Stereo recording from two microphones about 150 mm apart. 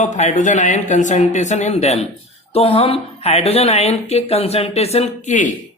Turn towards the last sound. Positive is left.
turn(degrees=55)  # may be behind; listen again after turning